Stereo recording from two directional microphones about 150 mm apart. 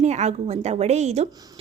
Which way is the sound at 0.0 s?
50° right (ahead or behind).